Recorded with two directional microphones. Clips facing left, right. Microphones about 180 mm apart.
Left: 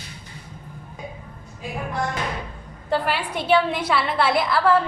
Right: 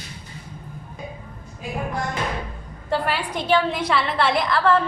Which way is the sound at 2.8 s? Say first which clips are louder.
Even; centre (ahead or behind).